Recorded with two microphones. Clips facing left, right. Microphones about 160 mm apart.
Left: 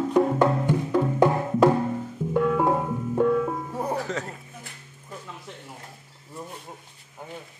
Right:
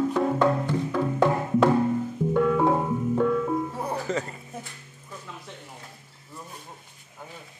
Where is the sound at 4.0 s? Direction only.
Centre (ahead or behind).